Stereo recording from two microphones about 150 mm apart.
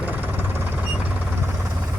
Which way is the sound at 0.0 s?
10° right (ahead or behind).